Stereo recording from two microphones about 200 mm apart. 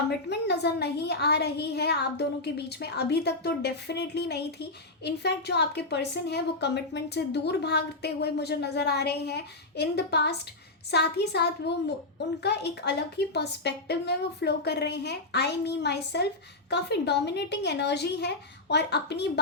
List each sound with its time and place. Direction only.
0.3 s a woman's voice: 55° left (ahead or behind)